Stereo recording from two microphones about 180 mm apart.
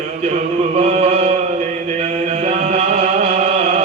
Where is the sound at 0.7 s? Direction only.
35° right (ahead or behind).